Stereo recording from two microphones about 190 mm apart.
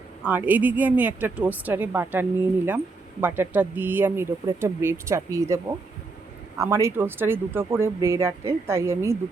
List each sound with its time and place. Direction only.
0.3 s speech: 10° right (ahead or behind)
6.6 s speech: 15° right (ahead or behind)